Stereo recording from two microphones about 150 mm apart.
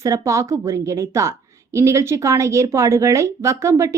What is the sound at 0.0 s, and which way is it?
A woman's voice, 20° right (ahead or behind).